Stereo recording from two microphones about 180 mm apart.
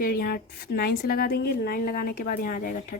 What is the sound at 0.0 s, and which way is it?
A woman's voice, 55° left (ahead or behind).